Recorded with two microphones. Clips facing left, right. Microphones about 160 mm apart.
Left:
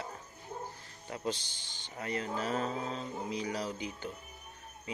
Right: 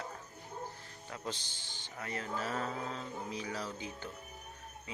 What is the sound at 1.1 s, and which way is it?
Music, 15° left (ahead or behind).